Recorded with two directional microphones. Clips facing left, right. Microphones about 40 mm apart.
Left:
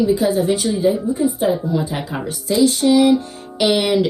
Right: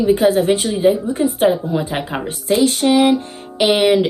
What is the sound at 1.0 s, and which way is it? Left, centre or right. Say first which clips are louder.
Speech: right 2 dB; right.